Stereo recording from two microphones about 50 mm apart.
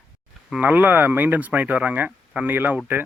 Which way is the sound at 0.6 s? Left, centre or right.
Right.